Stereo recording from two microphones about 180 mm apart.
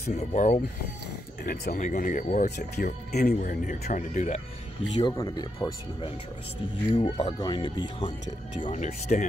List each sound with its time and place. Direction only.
0.1 s speech: 40° left (ahead or behind)
1.4 s speech: 55° left (ahead or behind)
5.1 s speech: 20° left (ahead or behind)
8.5 s speech: 45° left (ahead or behind)